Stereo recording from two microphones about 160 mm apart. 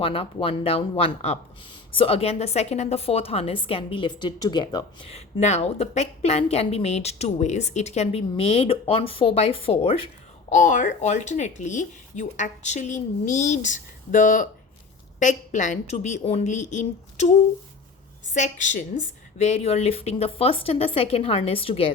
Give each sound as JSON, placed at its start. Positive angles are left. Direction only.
{"t": 0.0, "sound": "a woman's voice", "side_deg": 35}
{"t": 10.5, "sound": "a woman's voice", "side_deg": 55}